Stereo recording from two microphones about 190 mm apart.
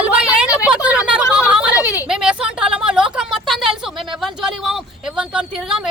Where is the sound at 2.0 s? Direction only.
5° right (ahead or behind).